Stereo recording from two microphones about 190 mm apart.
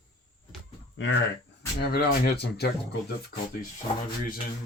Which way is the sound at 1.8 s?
55° left (ahead or behind).